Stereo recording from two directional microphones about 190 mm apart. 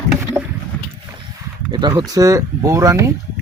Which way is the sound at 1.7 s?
20° right (ahead or behind).